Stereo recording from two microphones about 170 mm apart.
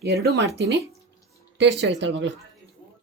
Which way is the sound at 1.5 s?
90° right.